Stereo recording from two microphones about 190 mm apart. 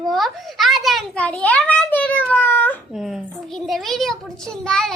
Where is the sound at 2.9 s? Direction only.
Centre (ahead or behind).